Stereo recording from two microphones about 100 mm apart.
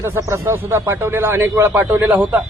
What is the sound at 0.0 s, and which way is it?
A man's voice, 25° right (ahead or behind).